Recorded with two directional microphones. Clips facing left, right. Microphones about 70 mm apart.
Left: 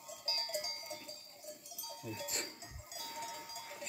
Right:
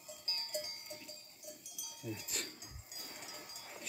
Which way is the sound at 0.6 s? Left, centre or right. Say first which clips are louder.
Left 4 dB; left.